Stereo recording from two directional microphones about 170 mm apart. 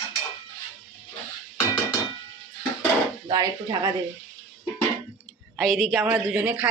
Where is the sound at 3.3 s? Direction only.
20° right (ahead or behind).